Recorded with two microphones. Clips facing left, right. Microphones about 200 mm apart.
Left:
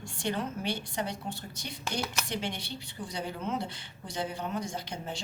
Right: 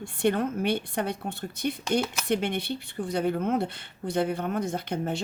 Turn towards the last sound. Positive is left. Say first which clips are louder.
# right 8 dB
turn(degrees=-60)  # may be behind; listen again after turning